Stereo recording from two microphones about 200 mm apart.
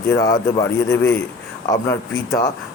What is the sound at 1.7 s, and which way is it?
Speech, 15° left (ahead or behind).